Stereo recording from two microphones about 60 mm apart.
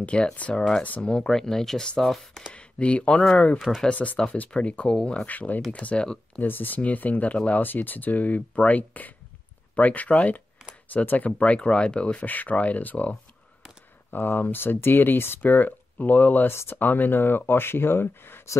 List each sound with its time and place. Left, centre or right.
0.0 s speech: centre
1.0 s speech: centre
2.5 s speech: centre
3.5 s speech: centre
3.9 s speech: left
14.1 s speech: left